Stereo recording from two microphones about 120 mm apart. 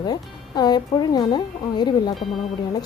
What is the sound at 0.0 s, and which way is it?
A woman's voice, 35° left (ahead or behind).